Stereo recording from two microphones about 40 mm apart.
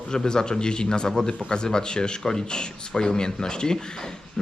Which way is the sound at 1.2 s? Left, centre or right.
Centre.